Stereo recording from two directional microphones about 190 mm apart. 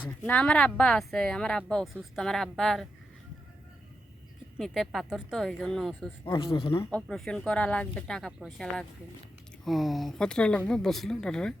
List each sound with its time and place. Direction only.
0.3 s a woman's voice: 5° left (ahead or behind)
4.5 s a woman's voice: centre (ahead or behind)
6.5 s speech: 30° left (ahead or behind)
6.7 s a woman's voice: 5° left (ahead or behind)